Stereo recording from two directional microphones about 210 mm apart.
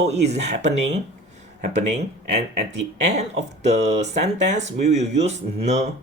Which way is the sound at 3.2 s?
30° right (ahead or behind).